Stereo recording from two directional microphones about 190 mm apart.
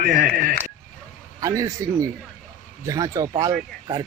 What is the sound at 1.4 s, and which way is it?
Speech, 15° right (ahead or behind).